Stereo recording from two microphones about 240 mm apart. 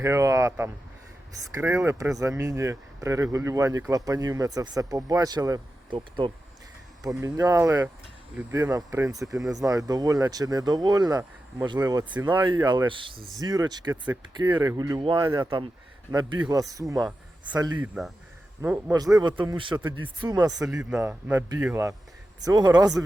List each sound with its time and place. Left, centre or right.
0.0 s speech: centre
20.9 s speech: centre